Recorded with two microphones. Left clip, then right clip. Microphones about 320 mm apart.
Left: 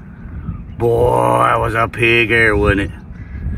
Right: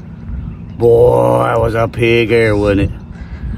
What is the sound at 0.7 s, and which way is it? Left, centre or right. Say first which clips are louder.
Speech: right 5 dB; centre.